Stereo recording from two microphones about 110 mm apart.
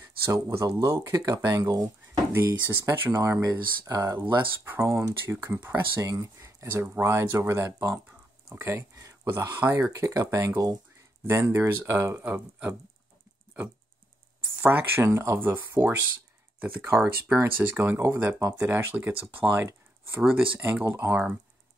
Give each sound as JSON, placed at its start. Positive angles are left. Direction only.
{"t": 0.0, "sound": "speech", "side_deg": -20}
{"t": 4.4, "sound": "speech", "side_deg": -20}
{"t": 8.9, "sound": "speech", "side_deg": -35}
{"t": 9.5, "sound": "speech", "side_deg": -20}
{"t": 14.6, "sound": "speech", "side_deg": -20}